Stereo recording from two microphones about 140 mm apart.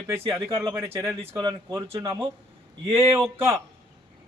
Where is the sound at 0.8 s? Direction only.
15° right (ahead or behind).